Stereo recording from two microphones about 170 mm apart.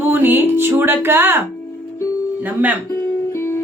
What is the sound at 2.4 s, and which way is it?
Speech, 10° right (ahead or behind).